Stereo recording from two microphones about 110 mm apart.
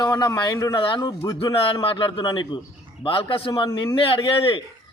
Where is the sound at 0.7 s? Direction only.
50° left (ahead or behind).